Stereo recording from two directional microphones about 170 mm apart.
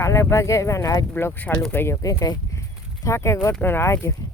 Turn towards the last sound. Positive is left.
turn(degrees=15)  # may be behind; listen again after turning